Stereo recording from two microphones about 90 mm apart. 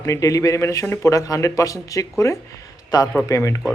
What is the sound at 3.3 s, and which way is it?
Speech, 35° left (ahead or behind).